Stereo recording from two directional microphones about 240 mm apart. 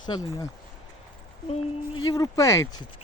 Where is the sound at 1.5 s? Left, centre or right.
Centre.